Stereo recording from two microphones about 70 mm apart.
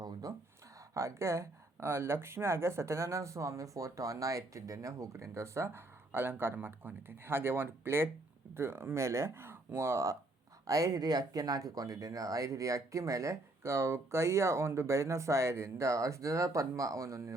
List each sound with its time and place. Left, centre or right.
0.0 s a sound: right
0.9 s speech: right
10.7 s speech: right